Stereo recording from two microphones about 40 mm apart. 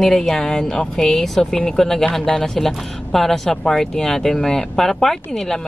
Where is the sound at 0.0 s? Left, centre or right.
Centre.